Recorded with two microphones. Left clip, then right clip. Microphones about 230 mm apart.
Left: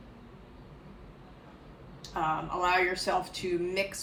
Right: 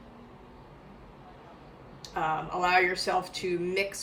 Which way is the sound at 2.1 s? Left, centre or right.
Centre.